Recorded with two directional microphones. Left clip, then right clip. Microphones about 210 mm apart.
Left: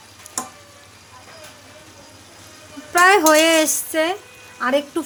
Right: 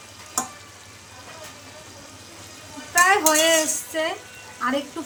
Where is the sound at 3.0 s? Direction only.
55° left (ahead or behind).